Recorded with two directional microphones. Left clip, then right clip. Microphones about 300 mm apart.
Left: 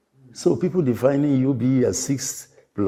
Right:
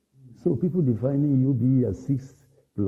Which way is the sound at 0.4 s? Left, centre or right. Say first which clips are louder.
Left 5 dB; centre.